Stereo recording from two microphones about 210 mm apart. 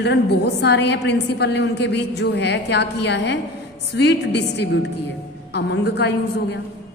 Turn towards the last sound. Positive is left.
turn(degrees=55)  # may be behind; listen again after turning